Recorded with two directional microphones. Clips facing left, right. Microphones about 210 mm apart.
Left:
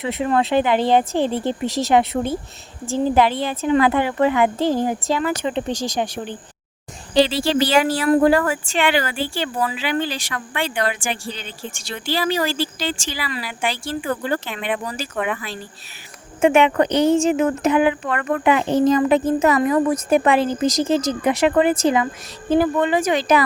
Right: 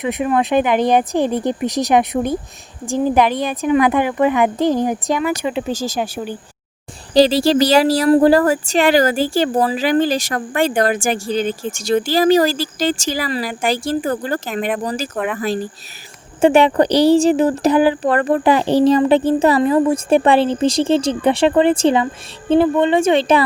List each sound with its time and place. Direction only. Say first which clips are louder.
0.0 s a woman's voice: right 2 dB; 15° right (ahead or behind)
7.1 s speech: right 5 dB; 40° right (ahead or behind)
15.1 s speech: right 2 dB; centre (ahead or behind)
16.4 s speech: right 3 dB; 35° right (ahead or behind)